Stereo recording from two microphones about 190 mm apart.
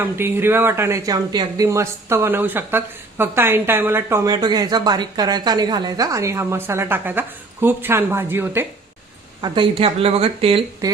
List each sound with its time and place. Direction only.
0.0 s speech: 10° right (ahead or behind)
9.4 s speech: 25° right (ahead or behind)